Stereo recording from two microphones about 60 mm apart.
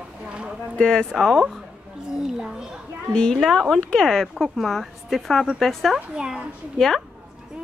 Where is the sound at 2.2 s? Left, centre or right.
Centre.